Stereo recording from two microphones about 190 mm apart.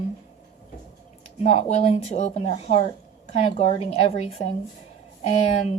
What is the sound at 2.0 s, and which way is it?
A woman's voice, 35° left (ahead or behind).